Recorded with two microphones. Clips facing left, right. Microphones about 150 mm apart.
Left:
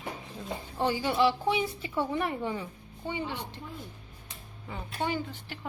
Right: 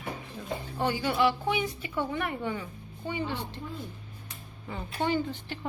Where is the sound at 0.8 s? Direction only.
30° left (ahead or behind).